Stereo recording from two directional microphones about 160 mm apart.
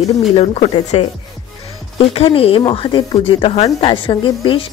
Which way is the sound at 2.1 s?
35° left (ahead or behind).